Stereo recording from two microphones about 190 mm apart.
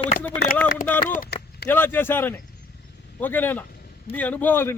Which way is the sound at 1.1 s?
55° left (ahead or behind).